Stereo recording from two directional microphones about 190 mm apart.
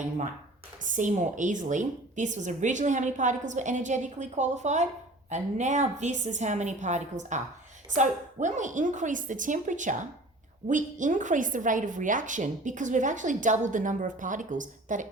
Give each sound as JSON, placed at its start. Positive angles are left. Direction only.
{"t": 0.8, "sound": "a woman's voice", "side_deg": -45}